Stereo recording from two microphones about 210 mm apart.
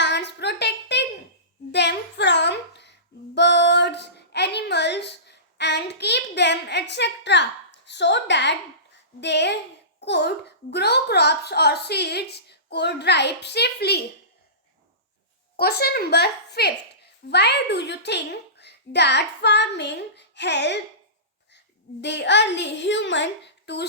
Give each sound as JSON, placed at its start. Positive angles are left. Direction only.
{"t": 0.0, "sound": "a sound", "side_deg": 55}
{"t": 10.0, "sound": "a child's voice", "side_deg": 55}
{"t": 15.5, "sound": "a woman's voice", "side_deg": 45}
{"t": 22.0, "sound": "a child's voice", "side_deg": 55}